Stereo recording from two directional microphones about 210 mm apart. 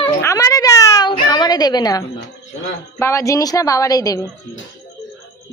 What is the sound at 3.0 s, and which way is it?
A woman's voice, 15° left (ahead or behind).